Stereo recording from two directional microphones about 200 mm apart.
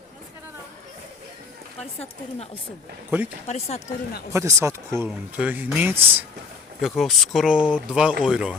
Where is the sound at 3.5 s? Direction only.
35° left (ahead or behind).